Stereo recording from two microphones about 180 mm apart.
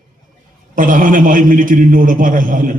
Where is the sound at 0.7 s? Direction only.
50° right (ahead or behind).